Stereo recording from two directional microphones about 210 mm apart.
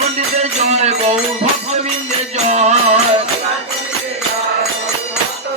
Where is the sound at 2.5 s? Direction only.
30° right (ahead or behind).